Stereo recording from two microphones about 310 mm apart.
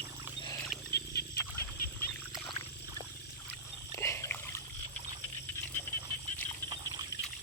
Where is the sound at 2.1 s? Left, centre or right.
Centre.